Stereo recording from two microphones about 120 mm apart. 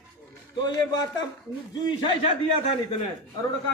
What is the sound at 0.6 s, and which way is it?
Speech, 35° left (ahead or behind).